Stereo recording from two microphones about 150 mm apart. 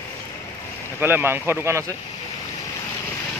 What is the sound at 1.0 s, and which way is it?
Speech, 15° right (ahead or behind).